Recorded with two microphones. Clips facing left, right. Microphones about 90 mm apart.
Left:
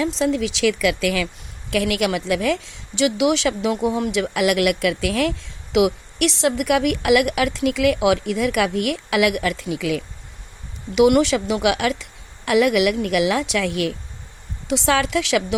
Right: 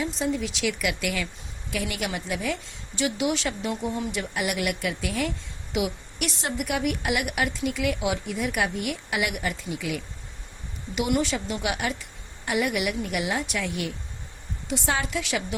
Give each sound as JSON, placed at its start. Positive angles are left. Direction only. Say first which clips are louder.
{"t": 0.0, "sound": "speech", "louder": "left 7 dB", "side_deg": 90}
{"t": 1.7, "sound": "speech", "louder": "left 9 dB", "side_deg": 90}
{"t": 10.9, "sound": "speech", "louder": "left 10 dB", "side_deg": 90}